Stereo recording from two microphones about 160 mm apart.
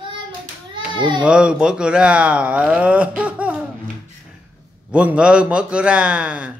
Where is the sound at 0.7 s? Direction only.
30° right (ahead or behind).